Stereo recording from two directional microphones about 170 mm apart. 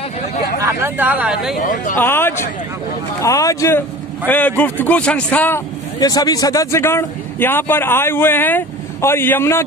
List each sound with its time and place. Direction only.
0.6 s speech: 15° right (ahead or behind)
1.6 s speech: 50° left (ahead or behind)
2.0 s speech: 15° left (ahead or behind)
5.9 s speech: 20° left (ahead or behind)